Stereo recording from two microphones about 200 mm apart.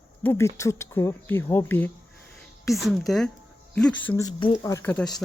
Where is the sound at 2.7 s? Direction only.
Centre (ahead or behind).